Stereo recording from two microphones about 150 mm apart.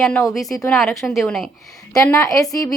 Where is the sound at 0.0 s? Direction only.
5° left (ahead or behind).